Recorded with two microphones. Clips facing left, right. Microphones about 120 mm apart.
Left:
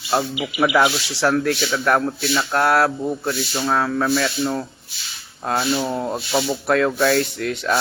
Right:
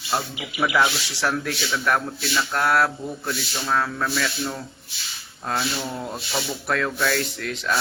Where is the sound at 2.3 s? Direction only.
50° left (ahead or behind).